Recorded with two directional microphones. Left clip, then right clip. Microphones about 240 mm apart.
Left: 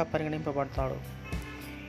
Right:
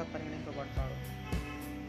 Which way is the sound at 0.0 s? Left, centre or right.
Left.